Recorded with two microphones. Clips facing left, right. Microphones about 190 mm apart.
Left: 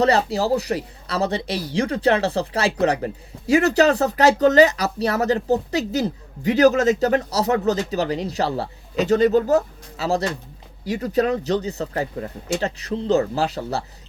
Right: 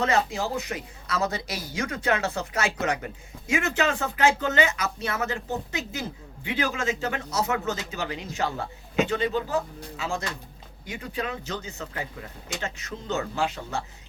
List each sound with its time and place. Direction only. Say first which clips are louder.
0.0 s speech: left 6 dB; 35° left (ahead or behind)